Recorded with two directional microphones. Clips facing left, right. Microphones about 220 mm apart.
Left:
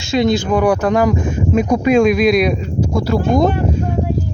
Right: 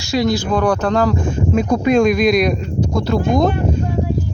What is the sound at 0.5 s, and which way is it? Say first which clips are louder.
Speech: left 2 dB; 10° left (ahead or behind).